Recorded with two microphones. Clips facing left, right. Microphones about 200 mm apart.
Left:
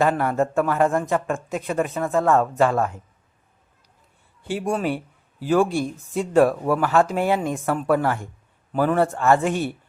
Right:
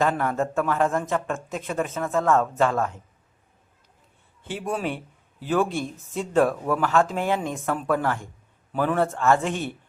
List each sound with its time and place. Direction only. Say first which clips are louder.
0.0 s speech: left 3 dB; 5° left (ahead or behind)
4.5 s speech: left 4 dB; centre (ahead or behind); by 8.3 s 15° left (ahead or behind)
8.7 s speech: left 3 dB; 5° left (ahead or behind)